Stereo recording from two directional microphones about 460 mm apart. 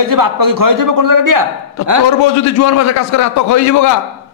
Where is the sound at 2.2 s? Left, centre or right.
Left.